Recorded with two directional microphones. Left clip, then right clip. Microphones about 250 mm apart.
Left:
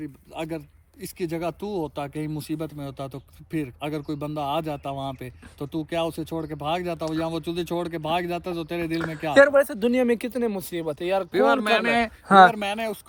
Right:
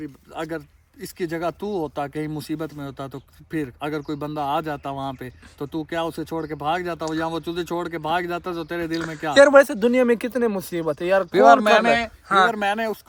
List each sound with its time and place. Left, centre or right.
0.0 s speech: centre
9.0 s speech: centre
9.2 s speech: centre
9.5 s speech: right
9.7 s speech: centre
11.2 s speech: right
12.3 s speech: centre
12.5 s speech: centre